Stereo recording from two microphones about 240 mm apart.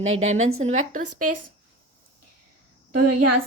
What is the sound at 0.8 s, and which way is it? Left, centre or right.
Speech, right.